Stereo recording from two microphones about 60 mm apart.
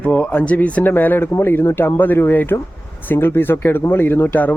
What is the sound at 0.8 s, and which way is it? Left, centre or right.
Speech, left.